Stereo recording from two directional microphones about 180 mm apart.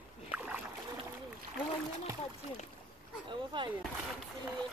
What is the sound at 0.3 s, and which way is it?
Rowboat, 10° right (ahead or behind).